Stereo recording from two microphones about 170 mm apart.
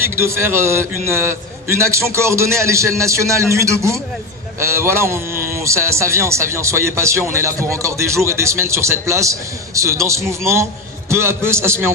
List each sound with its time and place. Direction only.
0.0 s a man's voice: 15° right (ahead or behind)